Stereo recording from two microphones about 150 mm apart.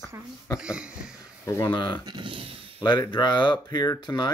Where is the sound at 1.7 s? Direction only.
30° left (ahead or behind).